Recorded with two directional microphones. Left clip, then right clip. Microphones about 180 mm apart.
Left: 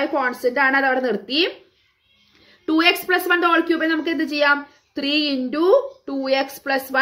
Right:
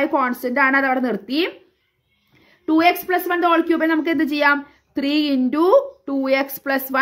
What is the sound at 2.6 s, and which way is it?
Speech, 30° right (ahead or behind).